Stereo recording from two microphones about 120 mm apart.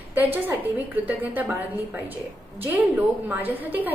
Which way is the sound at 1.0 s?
15° right (ahead or behind).